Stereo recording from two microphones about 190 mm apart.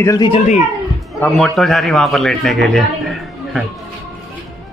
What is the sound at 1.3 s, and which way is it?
Speech, centre (ahead or behind).